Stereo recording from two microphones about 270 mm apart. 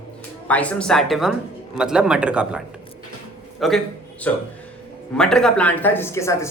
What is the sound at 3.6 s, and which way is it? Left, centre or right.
A man's voice, centre.